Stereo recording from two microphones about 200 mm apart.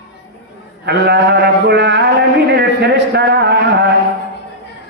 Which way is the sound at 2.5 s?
60° right (ahead or behind).